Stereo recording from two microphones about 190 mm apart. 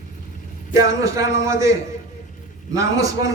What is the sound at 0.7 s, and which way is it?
A man's voice, 15° right (ahead or behind).